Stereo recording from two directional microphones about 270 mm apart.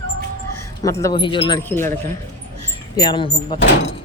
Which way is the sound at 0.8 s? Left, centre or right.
Centre.